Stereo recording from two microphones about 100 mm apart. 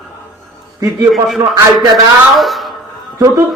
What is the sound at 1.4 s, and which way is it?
Speech, 35° right (ahead or behind).